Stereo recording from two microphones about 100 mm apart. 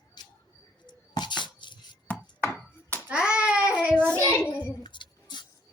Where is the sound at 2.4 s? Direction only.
20° left (ahead or behind).